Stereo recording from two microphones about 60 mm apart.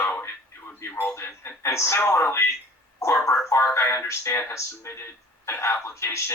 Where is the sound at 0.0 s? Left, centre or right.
Left.